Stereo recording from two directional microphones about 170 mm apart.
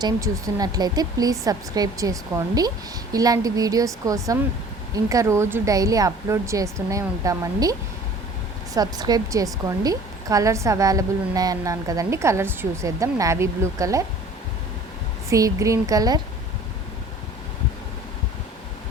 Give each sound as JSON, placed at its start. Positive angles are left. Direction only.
{"t": 0.0, "sound": "a woman's voice", "side_deg": -20}
{"t": 15.3, "sound": "a woman's voice", "side_deg": -20}